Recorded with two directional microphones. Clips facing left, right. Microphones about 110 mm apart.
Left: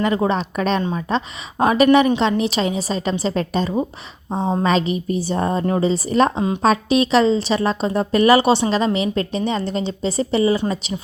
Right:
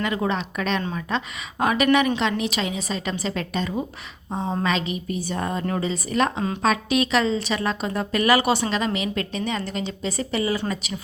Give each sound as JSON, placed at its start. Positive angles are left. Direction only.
{"t": 0.0, "sound": "a woman's voice", "side_deg": 35}
{"t": 0.8, "sound": "a woman's voice", "side_deg": 25}